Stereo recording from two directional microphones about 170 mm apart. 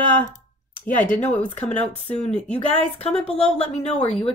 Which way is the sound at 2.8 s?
35° left (ahead or behind).